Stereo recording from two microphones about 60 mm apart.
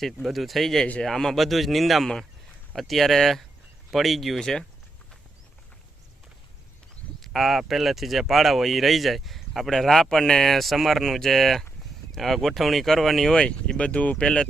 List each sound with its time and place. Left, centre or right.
0.0 s speech: centre
7.2 s speech: centre